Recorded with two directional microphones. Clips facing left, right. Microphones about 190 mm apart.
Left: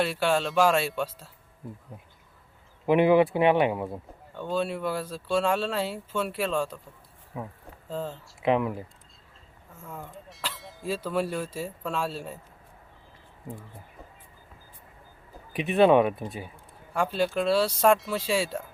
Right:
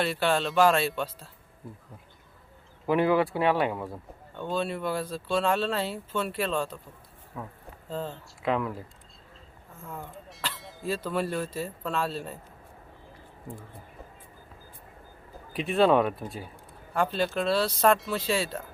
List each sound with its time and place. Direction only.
0.0 s speech: 10° left (ahead or behind)
2.8 s speech: 20° left (ahead or behind)
4.4 s speech: 5° left (ahead or behind)
9.8 s speech: 5° left (ahead or behind)
15.5 s speech: centre (ahead or behind)